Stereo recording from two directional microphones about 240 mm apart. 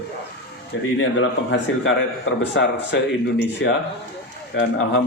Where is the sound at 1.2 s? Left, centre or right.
Left.